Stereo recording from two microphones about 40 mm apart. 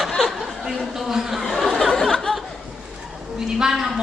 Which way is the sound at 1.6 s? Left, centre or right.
Centre.